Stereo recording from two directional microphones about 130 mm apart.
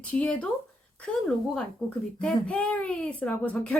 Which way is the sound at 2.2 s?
10° left (ahead or behind).